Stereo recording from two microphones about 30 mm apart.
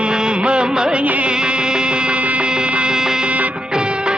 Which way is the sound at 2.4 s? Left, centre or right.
Right.